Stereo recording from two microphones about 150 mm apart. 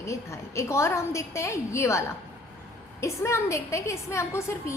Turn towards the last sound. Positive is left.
turn(degrees=20)  # may be behind; listen again after turning